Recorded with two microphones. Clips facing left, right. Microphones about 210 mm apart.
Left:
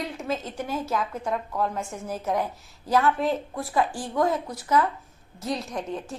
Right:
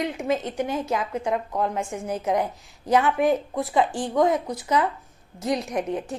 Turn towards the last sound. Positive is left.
turn(degrees=-20)  # may be behind; listen again after turning